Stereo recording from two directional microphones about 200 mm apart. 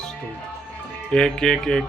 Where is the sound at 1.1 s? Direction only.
5° left (ahead or behind).